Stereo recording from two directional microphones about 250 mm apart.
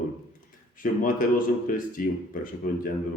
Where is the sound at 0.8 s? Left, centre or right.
Left.